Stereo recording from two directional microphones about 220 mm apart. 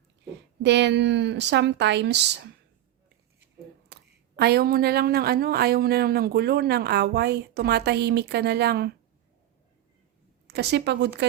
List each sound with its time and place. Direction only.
0.6 s speech: 50° right (ahead or behind)
3.9 s a sound: 50° right (ahead or behind)
4.4 s speech: 45° right (ahead or behind)
10.4 s speech: 50° right (ahead or behind)